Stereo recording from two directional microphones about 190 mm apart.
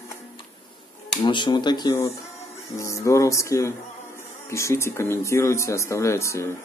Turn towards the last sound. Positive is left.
turn(degrees=15)  # may be behind; listen again after turning